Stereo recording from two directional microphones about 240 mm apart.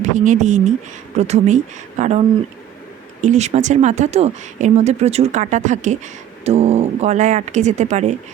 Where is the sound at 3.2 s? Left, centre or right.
Right.